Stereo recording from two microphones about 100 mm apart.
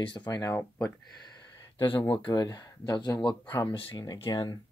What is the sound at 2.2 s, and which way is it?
Speech, 45° left (ahead or behind).